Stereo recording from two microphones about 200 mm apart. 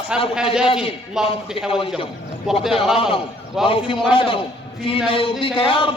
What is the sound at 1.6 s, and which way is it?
Speech, 30° left (ahead or behind).